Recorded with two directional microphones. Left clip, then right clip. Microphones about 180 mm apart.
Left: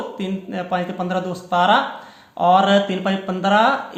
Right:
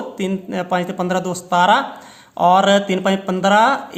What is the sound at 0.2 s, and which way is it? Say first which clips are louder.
Speech: right 4 dB; 40° right (ahead or behind).